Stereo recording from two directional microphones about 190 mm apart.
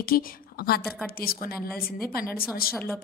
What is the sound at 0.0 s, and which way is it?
A woman's voice, 50° left (ahead or behind).